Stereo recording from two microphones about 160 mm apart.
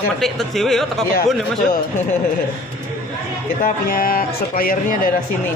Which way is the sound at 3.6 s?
65° left (ahead or behind).